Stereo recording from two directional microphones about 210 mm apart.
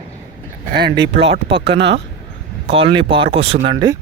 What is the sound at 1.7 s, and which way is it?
Speech, 60° right (ahead or behind).